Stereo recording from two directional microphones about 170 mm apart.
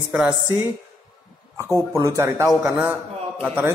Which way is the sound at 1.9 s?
20° right (ahead or behind).